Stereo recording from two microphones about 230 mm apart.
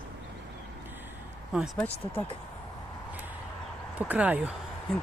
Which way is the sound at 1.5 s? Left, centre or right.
Centre.